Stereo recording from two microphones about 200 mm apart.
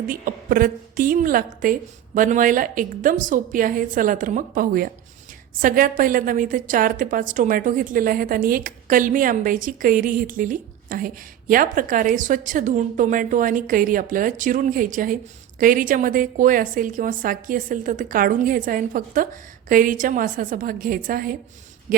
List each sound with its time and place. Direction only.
0.1 s a woman's voice: 45° right (ahead or behind)